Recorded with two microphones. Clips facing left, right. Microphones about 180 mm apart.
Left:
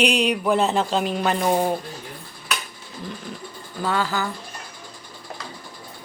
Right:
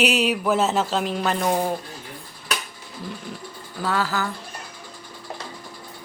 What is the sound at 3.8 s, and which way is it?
Speech, centre (ahead or behind).